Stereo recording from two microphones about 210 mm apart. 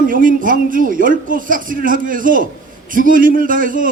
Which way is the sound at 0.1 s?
40° right (ahead or behind).